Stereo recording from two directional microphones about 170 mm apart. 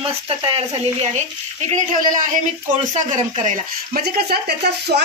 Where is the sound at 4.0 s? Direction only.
70° right (ahead or behind).